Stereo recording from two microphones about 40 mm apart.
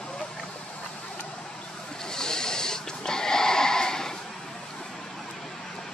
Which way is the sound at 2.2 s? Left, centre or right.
Centre.